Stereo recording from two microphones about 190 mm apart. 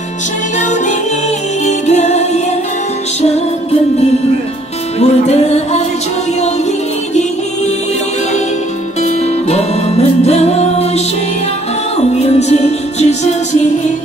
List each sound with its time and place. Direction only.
1.7 s music: 35° left (ahead or behind)
5.0 s music: 35° left (ahead or behind)
9.0 s music: 35° left (ahead or behind)
12.0 s music: 35° left (ahead or behind)